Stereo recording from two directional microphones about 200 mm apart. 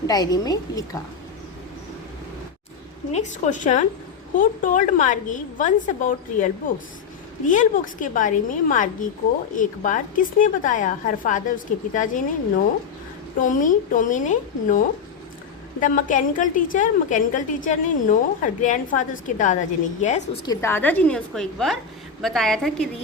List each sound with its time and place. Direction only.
0.1 s a woman's voice: 20° left (ahead or behind)
3.1 s a woman's voice: 35° left (ahead or behind)
13.4 s a woman's voice: 40° left (ahead or behind)
20.4 s a woman's voice: 15° left (ahead or behind)